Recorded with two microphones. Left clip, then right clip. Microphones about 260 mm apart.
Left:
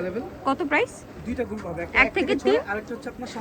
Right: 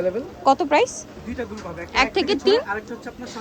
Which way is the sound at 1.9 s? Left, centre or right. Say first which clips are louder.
Right 1 dB; centre.